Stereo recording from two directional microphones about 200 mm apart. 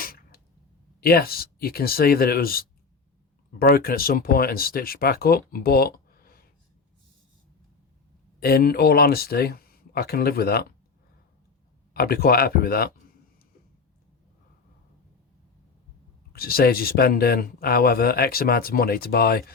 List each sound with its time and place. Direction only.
0.0 s a sound: 50° left (ahead or behind)
1.0 s speech: 50° left (ahead or behind)
8.4 s speech: 50° left (ahead or behind)
11.9 s speech: 50° left (ahead or behind)
16.3 s speech: 50° left (ahead or behind)